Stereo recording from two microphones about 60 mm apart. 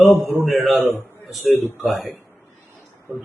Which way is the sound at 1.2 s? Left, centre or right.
Centre.